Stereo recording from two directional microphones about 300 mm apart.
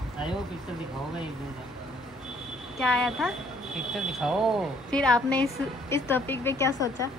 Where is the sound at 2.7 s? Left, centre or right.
Centre.